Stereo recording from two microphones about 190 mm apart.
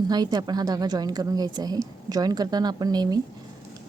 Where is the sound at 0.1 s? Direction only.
20° right (ahead or behind).